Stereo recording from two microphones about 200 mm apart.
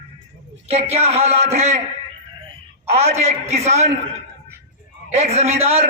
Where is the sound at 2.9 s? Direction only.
30° right (ahead or behind).